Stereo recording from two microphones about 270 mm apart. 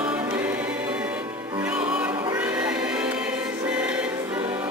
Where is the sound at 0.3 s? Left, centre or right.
Centre.